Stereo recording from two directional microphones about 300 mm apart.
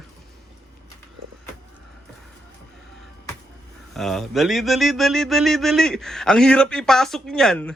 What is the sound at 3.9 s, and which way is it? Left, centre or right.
Speech, centre.